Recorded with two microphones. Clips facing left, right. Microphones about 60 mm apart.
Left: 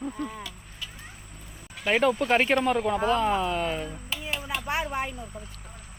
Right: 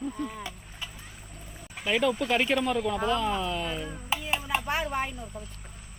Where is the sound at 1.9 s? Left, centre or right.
Left.